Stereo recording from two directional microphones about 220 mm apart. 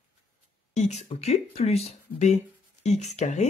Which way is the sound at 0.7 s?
30° left (ahead or behind).